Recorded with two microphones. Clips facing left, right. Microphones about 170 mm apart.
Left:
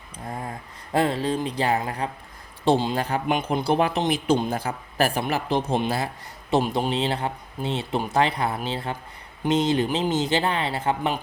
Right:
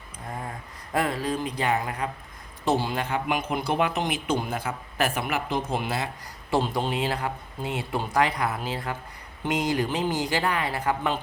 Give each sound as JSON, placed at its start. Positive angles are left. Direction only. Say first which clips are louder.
{"t": 0.3, "sound": "a sound", "louder": "left 2 dB", "side_deg": 30}
{"t": 0.9, "sound": "speech", "louder": "left 4 dB", "side_deg": 30}
{"t": 2.6, "sound": "speech", "louder": "left 4 dB", "side_deg": 20}
{"t": 2.9, "sound": "speech", "louder": "left 3 dB", "side_deg": 35}
{"t": 6.5, "sound": "speech", "louder": "left 3 dB", "side_deg": 15}